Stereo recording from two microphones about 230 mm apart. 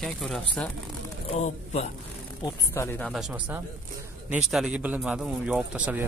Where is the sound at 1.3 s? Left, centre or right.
Left.